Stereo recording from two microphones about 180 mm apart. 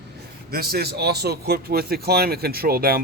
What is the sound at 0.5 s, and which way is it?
Speech, 60° right (ahead or behind).